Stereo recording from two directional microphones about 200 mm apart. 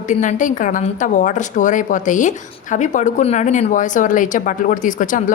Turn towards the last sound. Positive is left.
turn(degrees=40)  # may be behind; listen again after turning